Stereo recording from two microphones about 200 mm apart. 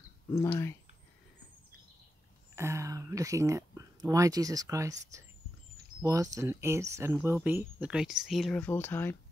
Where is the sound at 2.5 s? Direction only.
15° right (ahead or behind); by 9.1 s 10° left (ahead or behind).